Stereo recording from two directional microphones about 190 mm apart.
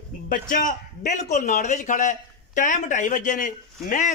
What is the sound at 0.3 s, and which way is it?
A man's voice, 45° left (ahead or behind).